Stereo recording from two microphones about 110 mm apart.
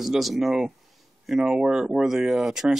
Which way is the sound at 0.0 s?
Centre (ahead or behind).